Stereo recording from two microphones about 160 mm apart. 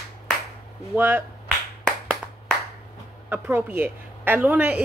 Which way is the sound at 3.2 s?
15° right (ahead or behind).